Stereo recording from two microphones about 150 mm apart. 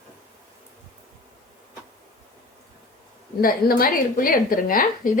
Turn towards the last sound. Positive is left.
turn(degrees=65)  # may be behind; listen again after turning